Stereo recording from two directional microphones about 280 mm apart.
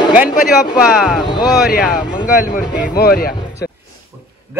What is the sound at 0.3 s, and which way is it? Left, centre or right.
Speech, left.